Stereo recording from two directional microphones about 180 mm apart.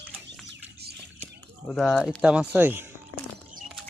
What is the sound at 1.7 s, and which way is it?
Speech, 5° left (ahead or behind).